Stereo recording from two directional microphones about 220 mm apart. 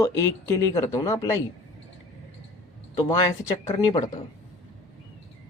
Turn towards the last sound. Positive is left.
turn(degrees=20)  # may be behind; listen again after turning